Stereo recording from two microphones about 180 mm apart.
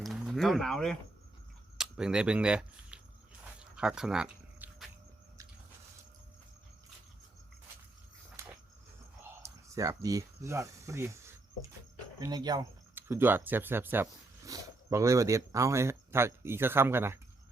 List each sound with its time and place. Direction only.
0.0 s speech: centre (ahead or behind)
3.6 s a sound: 5° right (ahead or behind)
8.4 s dog: 15° right (ahead or behind)
9.4 s speech: 15° right (ahead or behind)
12.2 s speech: 20° right (ahead or behind)
12.9 s speech: 10° right (ahead or behind)